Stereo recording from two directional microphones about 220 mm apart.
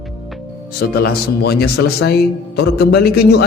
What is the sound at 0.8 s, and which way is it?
Speech, 45° left (ahead or behind).